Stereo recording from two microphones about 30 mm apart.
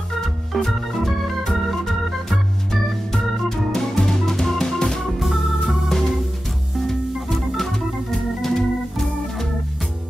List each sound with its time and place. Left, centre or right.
0.7 s organ: centre
4.7 s music: left
5.2 s organ: centre
5.9 s music: centre
8.4 s organ: centre